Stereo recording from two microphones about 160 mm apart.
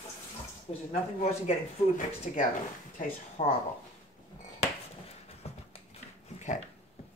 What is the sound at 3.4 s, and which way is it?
Speech, 40° left (ahead or behind).